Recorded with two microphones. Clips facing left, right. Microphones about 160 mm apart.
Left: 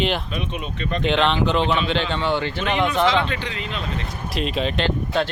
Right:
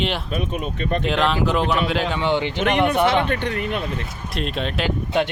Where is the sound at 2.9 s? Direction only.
55° right (ahead or behind).